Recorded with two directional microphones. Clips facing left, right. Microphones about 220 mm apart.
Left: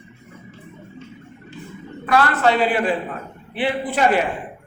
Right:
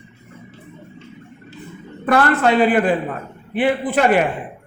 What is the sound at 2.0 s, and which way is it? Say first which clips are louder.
A man's voice: right 2 dB; 50° right (ahead or behind).